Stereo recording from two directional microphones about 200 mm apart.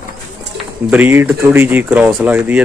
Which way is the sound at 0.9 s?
10° right (ahead or behind).